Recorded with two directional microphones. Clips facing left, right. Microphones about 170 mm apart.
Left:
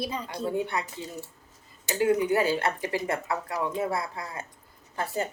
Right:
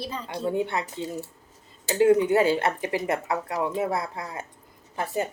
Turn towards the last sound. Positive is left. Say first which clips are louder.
# right 2 dB
turn(degrees=-15)  # may be behind; listen again after turning